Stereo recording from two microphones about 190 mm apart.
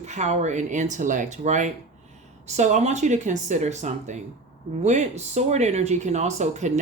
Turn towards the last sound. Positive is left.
turn(degrees=-35)  # may be behind; listen again after turning